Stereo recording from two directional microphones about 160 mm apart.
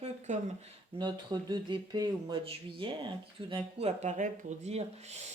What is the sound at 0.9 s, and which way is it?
Speech, 30° right (ahead or behind).